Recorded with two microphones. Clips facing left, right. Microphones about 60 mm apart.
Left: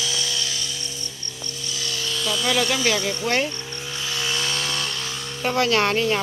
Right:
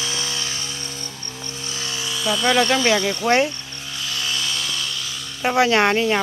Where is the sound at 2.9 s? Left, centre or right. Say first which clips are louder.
Right 4 dB; right.